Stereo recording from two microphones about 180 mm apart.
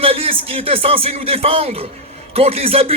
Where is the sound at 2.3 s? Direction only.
30° right (ahead or behind).